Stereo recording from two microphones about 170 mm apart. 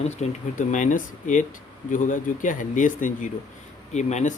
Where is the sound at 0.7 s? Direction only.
50° left (ahead or behind).